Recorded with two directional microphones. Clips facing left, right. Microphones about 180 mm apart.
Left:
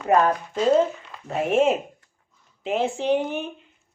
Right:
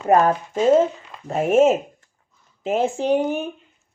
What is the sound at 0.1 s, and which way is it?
Speech, 45° right (ahead or behind).